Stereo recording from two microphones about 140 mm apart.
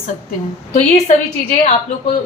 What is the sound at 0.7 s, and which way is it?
A woman's voice, 60° left (ahead or behind).